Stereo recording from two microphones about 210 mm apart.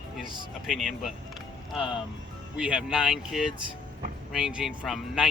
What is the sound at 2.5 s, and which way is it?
Speech, 5° right (ahead or behind).